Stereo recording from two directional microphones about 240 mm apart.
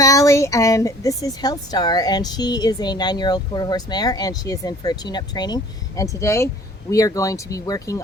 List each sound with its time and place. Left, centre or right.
0.0 s a woman's voice: centre